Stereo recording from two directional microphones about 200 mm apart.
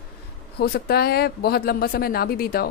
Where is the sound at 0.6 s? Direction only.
50° left (ahead or behind).